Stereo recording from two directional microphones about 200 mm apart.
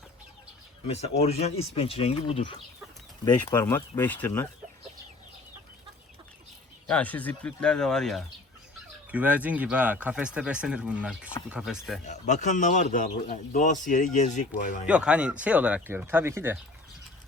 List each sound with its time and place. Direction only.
0.9 s a man's voice: 30° left (ahead or behind)
3.2 s speech: 15° left (ahead or behind)
6.8 s speech: 5° left (ahead or behind)
12.0 s a man's voice: 35° left (ahead or behind)
14.8 s speech: 5° right (ahead or behind)